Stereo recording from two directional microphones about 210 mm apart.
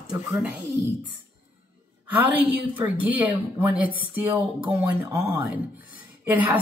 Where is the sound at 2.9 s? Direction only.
5° right (ahead or behind).